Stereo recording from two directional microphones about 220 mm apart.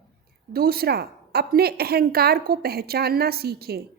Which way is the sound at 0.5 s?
45° right (ahead or behind).